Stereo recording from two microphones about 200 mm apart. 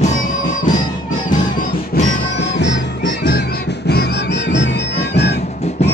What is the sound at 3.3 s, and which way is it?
Music, 55° left (ahead or behind).